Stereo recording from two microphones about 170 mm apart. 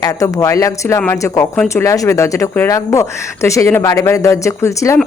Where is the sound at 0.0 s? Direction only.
20° left (ahead or behind).